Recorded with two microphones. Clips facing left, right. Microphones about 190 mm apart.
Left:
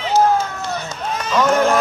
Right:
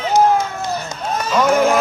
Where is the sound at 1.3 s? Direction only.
5° right (ahead or behind).